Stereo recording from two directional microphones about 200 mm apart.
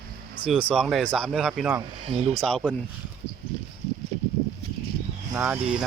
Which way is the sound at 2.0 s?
30° right (ahead or behind).